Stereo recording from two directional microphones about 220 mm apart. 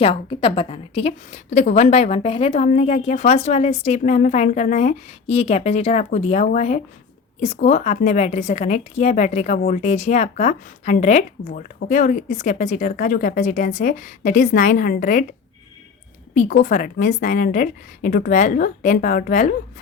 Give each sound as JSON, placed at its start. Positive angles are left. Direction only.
{"t": 0.0, "sound": "a woman's voice", "side_deg": 25}
{"t": 16.3, "sound": "a woman's voice", "side_deg": 35}